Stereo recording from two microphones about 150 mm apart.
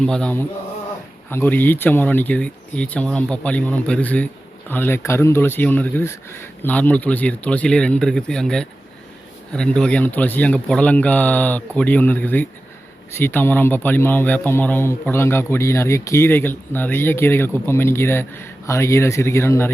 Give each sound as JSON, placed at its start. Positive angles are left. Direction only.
{"t": 0.0, "sound": "a man's voice", "side_deg": 5}